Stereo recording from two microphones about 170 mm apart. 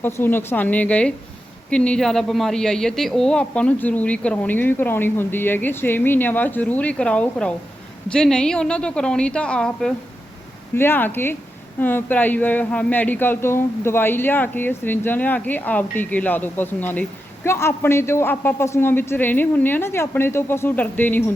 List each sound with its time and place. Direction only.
0.0 s a woman's voice: 10° left (ahead or behind)